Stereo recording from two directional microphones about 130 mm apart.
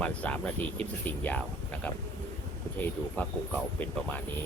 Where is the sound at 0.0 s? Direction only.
10° left (ahead or behind).